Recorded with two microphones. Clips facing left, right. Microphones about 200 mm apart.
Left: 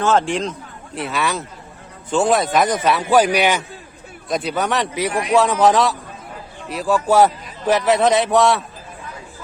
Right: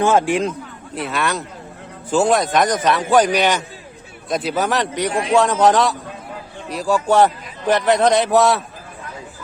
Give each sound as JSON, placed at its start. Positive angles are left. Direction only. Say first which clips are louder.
{"t": 0.0, "sound": "a man's voice", "louder": "right 2 dB", "side_deg": -10}
{"t": 4.3, "sound": "a man's voice", "louder": "right 1 dB", "side_deg": 0}
{"t": 5.1, "sound": "a man's voice", "louder": "even", "side_deg": -30}
{"t": 5.4, "sound": "a man's voice", "louder": "even", "side_deg": 0}